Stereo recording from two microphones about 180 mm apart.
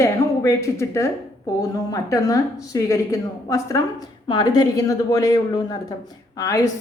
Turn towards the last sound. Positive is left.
turn(degrees=20)  # may be behind; listen again after turning